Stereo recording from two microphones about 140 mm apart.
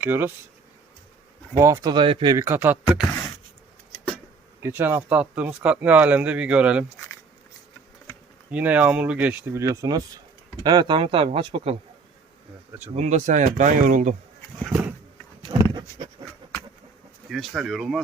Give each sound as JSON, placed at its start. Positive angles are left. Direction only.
{"t": 0.0, "sound": "speech", "side_deg": -15}
{"t": 1.5, "sound": "speech", "side_deg": -20}
{"t": 2.3, "sound": "speech", "side_deg": -20}
{"t": 4.6, "sound": "speech", "side_deg": -15}
{"t": 8.4, "sound": "speech", "side_deg": -10}
{"t": 12.9, "sound": "speech", "side_deg": -55}
{"t": 14.7, "sound": "a sound", "side_deg": -10}
{"t": 15.5, "sound": "goat", "side_deg": -30}
{"t": 17.2, "sound": "speech", "side_deg": 0}